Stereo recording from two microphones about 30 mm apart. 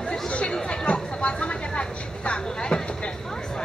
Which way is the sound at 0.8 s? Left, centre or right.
Left.